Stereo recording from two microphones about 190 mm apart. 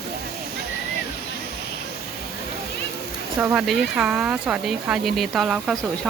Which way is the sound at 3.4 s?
5° right (ahead or behind).